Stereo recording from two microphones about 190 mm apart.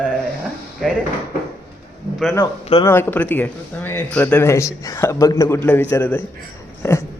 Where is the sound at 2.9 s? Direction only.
10° left (ahead or behind).